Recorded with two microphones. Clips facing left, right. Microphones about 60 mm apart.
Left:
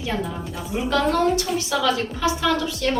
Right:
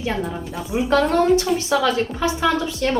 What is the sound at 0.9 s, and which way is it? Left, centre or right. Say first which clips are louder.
A woman's voice: right 3 dB; right.